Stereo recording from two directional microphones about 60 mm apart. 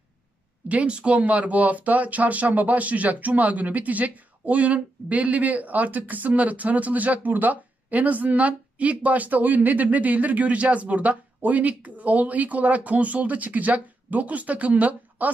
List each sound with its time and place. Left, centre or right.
0.7 s speech: right